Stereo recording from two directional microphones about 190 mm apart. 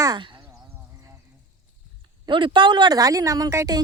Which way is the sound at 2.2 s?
25° right (ahead or behind).